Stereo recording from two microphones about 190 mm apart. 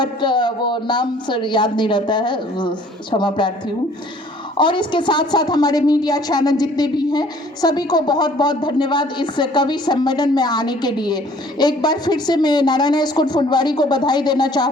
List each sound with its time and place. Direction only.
0.0 s a woman's voice: 25° left (ahead or behind)
4.5 s a woman's voice: 25° left (ahead or behind)